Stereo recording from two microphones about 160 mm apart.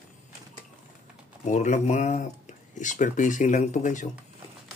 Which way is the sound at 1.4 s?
50° left (ahead or behind).